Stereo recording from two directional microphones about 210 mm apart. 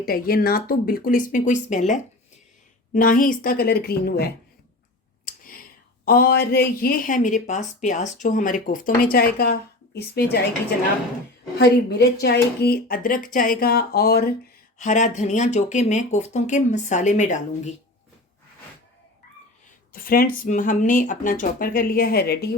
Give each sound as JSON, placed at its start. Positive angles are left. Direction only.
{"t": 0.0, "sound": "speech", "side_deg": 45}
{"t": 2.9, "sound": "speech", "side_deg": 40}
{"t": 6.1, "sound": "speech", "side_deg": 45}
{"t": 11.5, "sound": "speech", "side_deg": 55}
{"t": 14.8, "sound": "speech", "side_deg": 35}
{"t": 19.9, "sound": "speech", "side_deg": 45}